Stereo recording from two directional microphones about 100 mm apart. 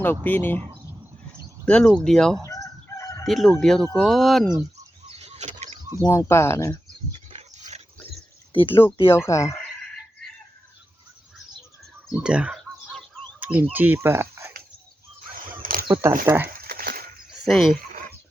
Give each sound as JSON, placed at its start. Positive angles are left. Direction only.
{"t": 0.0, "sound": "speech", "side_deg": 20}
{"t": 1.6, "sound": "speech", "side_deg": 10}
{"t": 2.4, "sound": "crowing", "side_deg": 35}
{"t": 3.2, "sound": "speech", "side_deg": 0}
{"t": 5.0, "sound": "vehicle", "side_deg": -90}
{"t": 6.1, "sound": "speech", "side_deg": 25}
{"t": 7.3, "sound": "dog", "side_deg": -90}
{"t": 8.5, "sound": "speech", "side_deg": 20}
{"t": 12.0, "sound": "speech", "side_deg": -10}
{"t": 16.0, "sound": "speech", "side_deg": -25}
{"t": 17.5, "sound": "speech", "side_deg": 0}